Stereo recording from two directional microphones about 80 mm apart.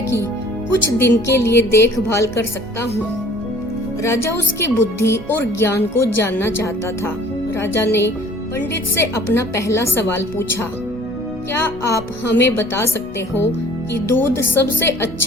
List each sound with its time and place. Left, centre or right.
0.7 s speech: left
4.0 s speech: left
13.9 s a woman's voice: left